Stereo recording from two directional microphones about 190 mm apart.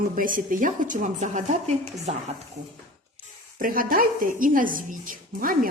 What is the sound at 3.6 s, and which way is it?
A woman's voice, 45° right (ahead or behind).